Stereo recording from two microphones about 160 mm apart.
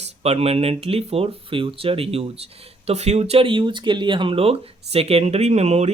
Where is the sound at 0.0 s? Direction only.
40° right (ahead or behind).